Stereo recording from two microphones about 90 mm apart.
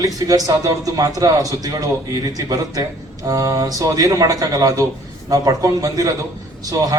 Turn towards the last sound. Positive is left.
turn(degrees=-40)  # may be behind; listen again after turning